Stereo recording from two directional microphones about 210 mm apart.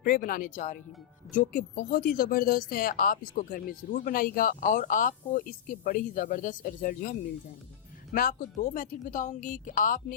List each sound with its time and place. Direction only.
0.0 s speech: 40° left (ahead or behind)